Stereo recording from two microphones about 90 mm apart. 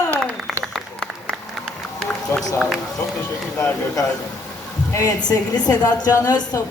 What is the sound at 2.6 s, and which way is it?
Speech, centre (ahead or behind).